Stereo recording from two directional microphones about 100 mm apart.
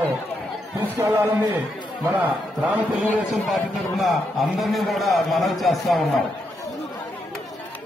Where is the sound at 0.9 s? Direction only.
25° right (ahead or behind).